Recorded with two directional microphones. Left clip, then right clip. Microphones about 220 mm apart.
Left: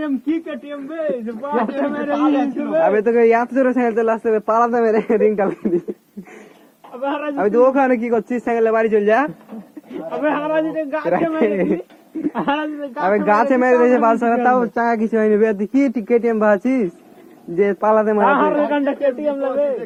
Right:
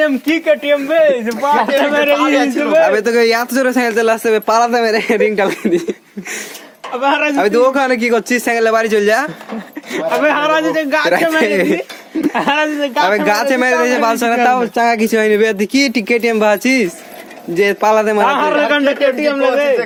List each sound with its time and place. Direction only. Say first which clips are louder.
0.0 s a man's voice: right 9 dB; 60° right (ahead or behind)
2.2 s speech: right 5 dB; 35° right (ahead or behind)
7.0 s speech: right 7 dB; 35° right (ahead or behind); by 7.9 s 15° right (ahead or behind)
8.0 s a man's voice: right 6 dB; 25° right (ahead or behind)
12.3 s a man's voice: right 6 dB; 45° right (ahead or behind)